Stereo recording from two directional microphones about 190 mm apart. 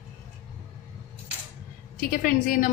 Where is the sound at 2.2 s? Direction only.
45° left (ahead or behind).